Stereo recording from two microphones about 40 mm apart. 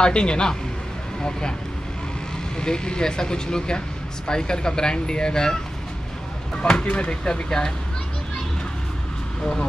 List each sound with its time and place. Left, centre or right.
0.0 s speech: left
2.5 s speech: left
9.4 s speech: centre